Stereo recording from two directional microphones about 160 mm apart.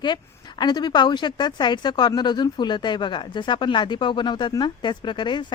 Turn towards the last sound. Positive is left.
turn(degrees=30)  # may be behind; listen again after turning